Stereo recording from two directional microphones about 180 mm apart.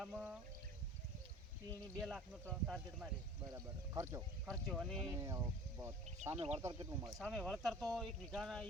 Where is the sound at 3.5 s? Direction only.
15° right (ahead or behind).